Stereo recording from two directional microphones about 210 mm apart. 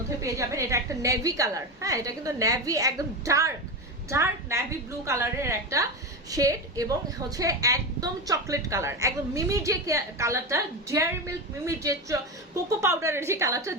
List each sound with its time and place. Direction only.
0.2 s a woman's voice: 15° right (ahead or behind)